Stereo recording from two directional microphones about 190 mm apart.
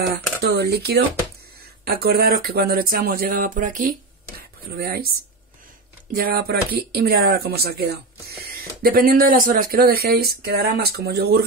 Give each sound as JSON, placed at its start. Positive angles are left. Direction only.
{"t": 0.1, "sound": "a woman's voice", "side_deg": -55}
{"t": 4.4, "sound": "speech", "side_deg": -55}
{"t": 6.1, "sound": "a woman's voice", "side_deg": -50}